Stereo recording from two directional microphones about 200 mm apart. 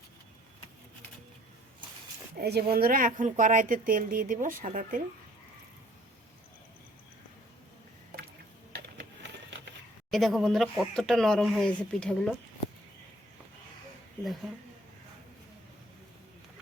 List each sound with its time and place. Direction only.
2.4 s speech: 55° right (ahead or behind)
8.7 s a sound: 60° right (ahead or behind)
10.1 s speech: centre (ahead or behind)